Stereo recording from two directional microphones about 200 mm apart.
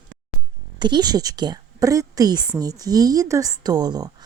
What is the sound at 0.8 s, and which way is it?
A woman's voice, 20° right (ahead or behind).